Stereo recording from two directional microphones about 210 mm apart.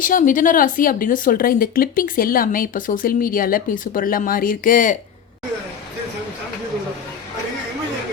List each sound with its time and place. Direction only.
0.0 s speech: 40° left (ahead or behind)